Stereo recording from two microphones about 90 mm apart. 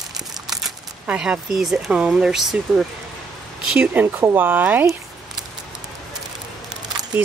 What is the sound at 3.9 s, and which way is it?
Speech, 20° right (ahead or behind).